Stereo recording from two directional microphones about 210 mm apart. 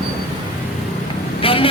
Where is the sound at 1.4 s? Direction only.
25° left (ahead or behind).